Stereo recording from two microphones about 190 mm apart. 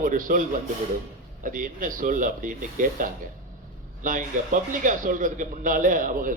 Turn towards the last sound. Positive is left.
turn(degrees=-45)  # may be behind; listen again after turning